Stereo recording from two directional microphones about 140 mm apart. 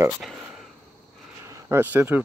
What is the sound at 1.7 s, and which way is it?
Speech, 15° right (ahead or behind).